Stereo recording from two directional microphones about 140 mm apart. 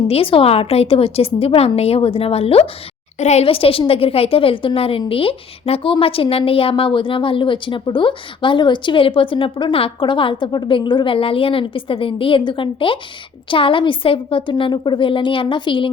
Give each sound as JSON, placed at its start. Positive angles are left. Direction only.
{"t": 0.1, "sound": "a woman's voice", "side_deg": 40}